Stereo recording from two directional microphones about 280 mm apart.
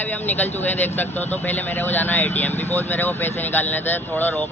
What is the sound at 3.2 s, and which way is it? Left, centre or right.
Speech, centre.